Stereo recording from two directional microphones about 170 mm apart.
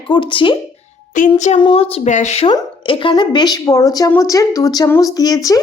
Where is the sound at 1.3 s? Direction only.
45° left (ahead or behind).